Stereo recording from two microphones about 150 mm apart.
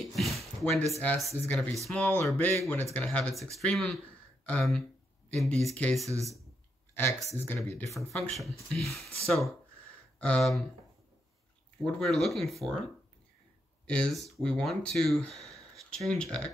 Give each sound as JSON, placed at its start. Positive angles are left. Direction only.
{"t": 0.1, "sound": "a sound", "side_deg": 0}
{"t": 0.8, "sound": "speech", "side_deg": 20}
{"t": 6.0, "sound": "speech", "side_deg": -20}
{"t": 6.9, "sound": "a sound", "side_deg": 15}
{"t": 7.3, "sound": "speech", "side_deg": 10}
{"t": 8.4, "sound": "speech", "side_deg": 0}
{"t": 11.8, "sound": "speech", "side_deg": 0}
{"t": 13.8, "sound": "speech", "side_deg": 5}